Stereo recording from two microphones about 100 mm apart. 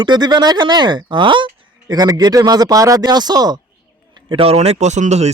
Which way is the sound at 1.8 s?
40° right (ahead or behind).